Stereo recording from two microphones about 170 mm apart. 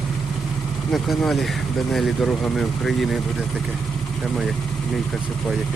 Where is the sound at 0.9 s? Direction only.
Centre (ahead or behind).